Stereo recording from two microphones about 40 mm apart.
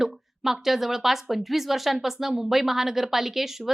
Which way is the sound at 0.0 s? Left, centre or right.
Centre.